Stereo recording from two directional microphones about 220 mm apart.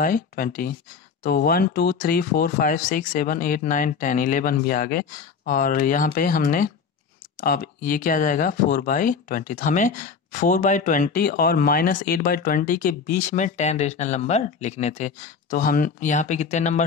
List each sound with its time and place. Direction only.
0.0 s speech: 40° left (ahead or behind)